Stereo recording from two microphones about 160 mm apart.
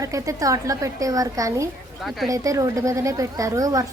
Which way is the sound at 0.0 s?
20° right (ahead or behind).